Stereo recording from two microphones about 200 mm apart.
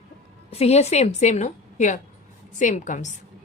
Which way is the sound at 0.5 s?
30° left (ahead or behind).